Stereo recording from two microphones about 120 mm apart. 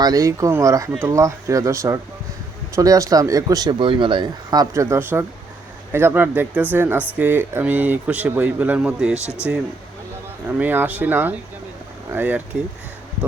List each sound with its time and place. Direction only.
0.0 s speech: 30° right (ahead or behind)